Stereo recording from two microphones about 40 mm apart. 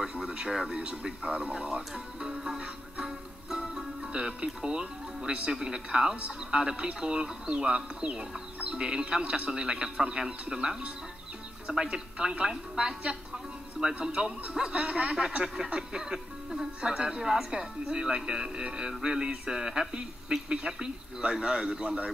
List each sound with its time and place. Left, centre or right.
0.0 s a sound: right
0.7 s speech: right
2.1 s speech: centre
3.0 s music: centre
4.1 s a man's voice: right
11.9 s a woman's voice: right